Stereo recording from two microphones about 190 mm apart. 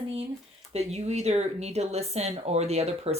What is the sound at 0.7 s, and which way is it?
Speech, 35° right (ahead or behind).